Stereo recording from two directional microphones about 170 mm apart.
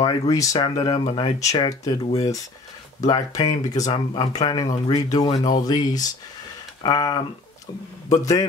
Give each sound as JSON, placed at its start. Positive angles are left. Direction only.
{"t": 0.0, "sound": "speech", "side_deg": 20}